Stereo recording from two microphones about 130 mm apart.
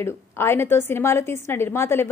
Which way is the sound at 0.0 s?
20° left (ahead or behind).